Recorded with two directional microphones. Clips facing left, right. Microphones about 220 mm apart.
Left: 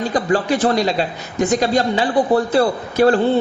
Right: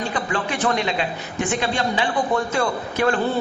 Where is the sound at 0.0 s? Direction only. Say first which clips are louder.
Left 7 dB; 35° left (ahead or behind).